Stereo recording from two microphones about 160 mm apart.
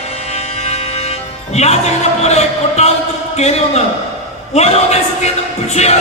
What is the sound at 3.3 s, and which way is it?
A man's voice, 40° left (ahead or behind).